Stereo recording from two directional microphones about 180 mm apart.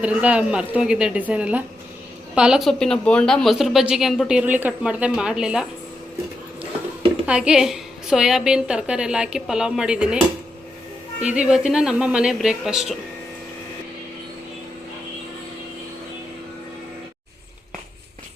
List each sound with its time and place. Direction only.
0.0 s a woman's voice: 5° right (ahead or behind)
7.3 s speech: 5° right (ahead or behind)
11.2 s speech: 5° right (ahead or behind)